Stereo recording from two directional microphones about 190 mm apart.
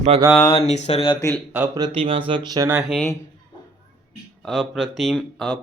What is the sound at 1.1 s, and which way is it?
Speech, 15° left (ahead or behind).